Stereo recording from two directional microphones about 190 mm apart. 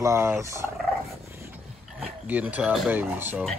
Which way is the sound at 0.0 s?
15° right (ahead or behind).